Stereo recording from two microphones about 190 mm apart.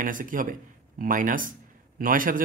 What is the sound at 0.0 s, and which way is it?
A man's voice, 45° right (ahead or behind).